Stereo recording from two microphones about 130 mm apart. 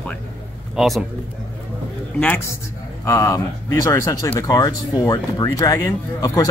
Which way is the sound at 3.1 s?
25° left (ahead or behind).